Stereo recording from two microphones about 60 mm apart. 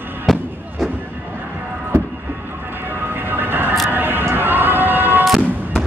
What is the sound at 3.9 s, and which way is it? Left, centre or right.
Music, right.